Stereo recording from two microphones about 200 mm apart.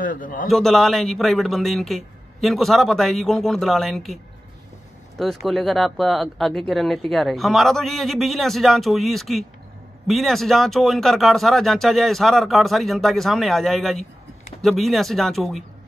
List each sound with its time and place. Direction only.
0.0 s a man's voice: 40° left (ahead or behind)
0.5 s speech: centre (ahead or behind)